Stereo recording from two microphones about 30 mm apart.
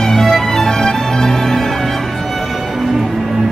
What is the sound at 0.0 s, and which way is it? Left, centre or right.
Music, centre.